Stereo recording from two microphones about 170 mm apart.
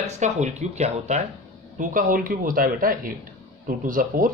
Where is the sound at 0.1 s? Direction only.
45° right (ahead or behind).